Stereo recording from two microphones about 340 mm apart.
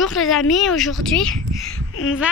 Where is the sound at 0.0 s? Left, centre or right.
Centre.